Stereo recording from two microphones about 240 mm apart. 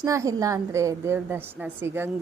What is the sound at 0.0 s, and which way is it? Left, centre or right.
A woman's voice, centre.